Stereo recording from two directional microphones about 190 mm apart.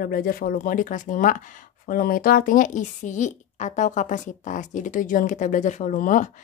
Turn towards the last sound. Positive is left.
turn(degrees=45)  # may be behind; listen again after turning